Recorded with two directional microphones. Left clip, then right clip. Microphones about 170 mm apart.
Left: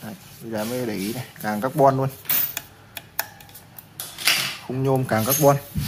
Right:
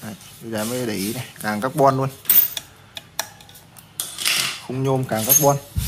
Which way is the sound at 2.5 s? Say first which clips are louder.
Right 3 dB; 15° left (ahead or behind).